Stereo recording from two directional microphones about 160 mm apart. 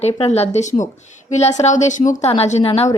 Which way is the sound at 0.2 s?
40° left (ahead or behind).